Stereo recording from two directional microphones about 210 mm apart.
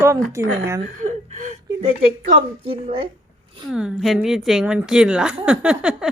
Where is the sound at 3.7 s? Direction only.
5° right (ahead or behind).